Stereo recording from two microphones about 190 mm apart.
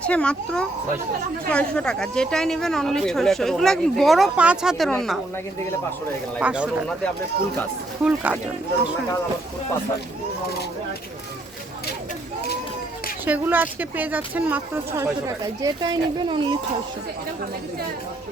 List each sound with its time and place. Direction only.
0.0 s speech: 5° left (ahead or behind)
6.4 s speech: 5° right (ahead or behind)
8.0 s speech: 5° right (ahead or behind)
13.2 s speech: 10° right (ahead or behind); by 16.6 s 25° right (ahead or behind)